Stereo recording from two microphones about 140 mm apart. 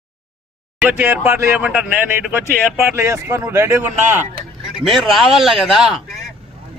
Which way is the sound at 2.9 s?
20° right (ahead or behind).